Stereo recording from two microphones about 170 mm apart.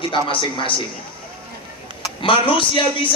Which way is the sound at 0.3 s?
30° left (ahead or behind).